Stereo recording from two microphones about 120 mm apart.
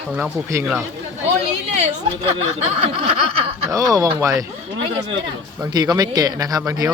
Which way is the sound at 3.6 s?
30° right (ahead or behind).